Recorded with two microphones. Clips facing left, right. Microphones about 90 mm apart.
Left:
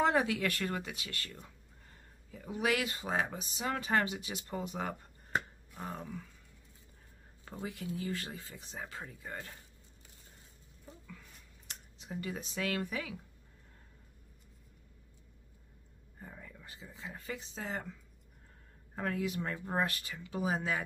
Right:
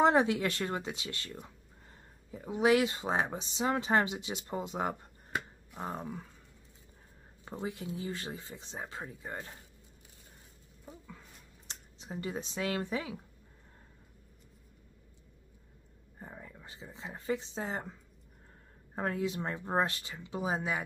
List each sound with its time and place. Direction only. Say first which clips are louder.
0.0 s speech: right 4 dB; 25° right (ahead or behind)
5.9 s speech: right 3 dB; 35° right (ahead or behind)
7.4 s speech: right 3 dB; 20° right (ahead or behind)
11.1 s a sound: right 1 dB; 30° right (ahead or behind)
16.2 s speech: right 2 dB; 25° right (ahead or behind)
18.9 s speech: right 2 dB; 25° right (ahead or behind)